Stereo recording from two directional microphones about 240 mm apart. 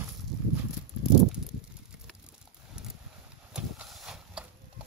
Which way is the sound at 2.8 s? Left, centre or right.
Centre.